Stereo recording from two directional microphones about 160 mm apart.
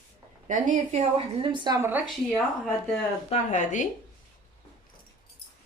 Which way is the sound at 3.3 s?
50° left (ahead or behind).